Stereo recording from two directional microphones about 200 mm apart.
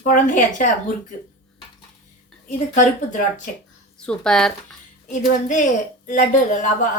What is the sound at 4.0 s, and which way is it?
Speech, 5° left (ahead or behind).